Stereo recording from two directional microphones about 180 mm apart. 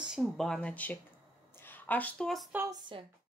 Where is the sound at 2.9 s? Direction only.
25° right (ahead or behind).